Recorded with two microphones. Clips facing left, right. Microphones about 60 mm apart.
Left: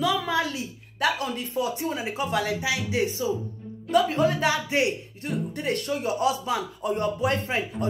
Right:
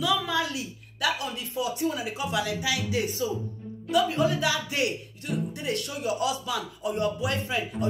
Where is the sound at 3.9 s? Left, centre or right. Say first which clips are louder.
Left 2 dB; left.